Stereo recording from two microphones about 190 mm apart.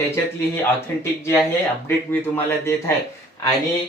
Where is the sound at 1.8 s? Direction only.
10° left (ahead or behind).